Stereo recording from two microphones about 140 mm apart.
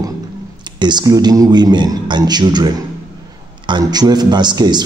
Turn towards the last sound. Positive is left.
turn(degrees=-30)  # may be behind; listen again after turning